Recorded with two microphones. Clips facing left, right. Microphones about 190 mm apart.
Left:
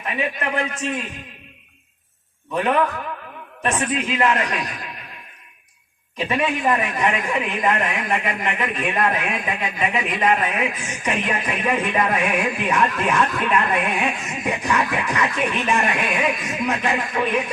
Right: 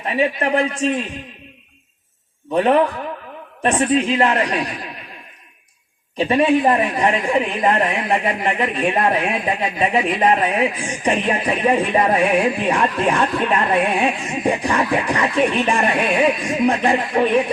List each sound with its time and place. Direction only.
0.0 s a man's voice: 35° right (ahead or behind)
2.5 s a man's voice: 35° right (ahead or behind)
6.1 s a man's voice: 35° right (ahead or behind)